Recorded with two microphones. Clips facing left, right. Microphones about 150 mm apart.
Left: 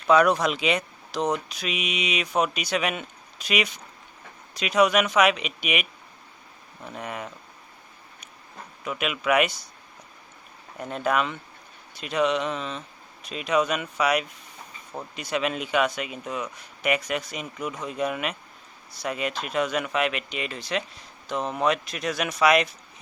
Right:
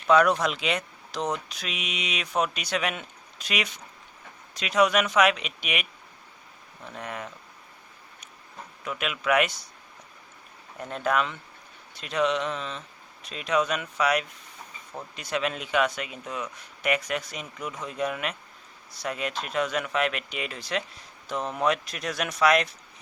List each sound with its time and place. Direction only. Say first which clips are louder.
0.1 s speech: left 1 dB; 5° left (ahead or behind)
8.8 s speech: left 3 dB; 5° left (ahead or behind)
10.8 s speech: left 1 dB; 5° left (ahead or behind)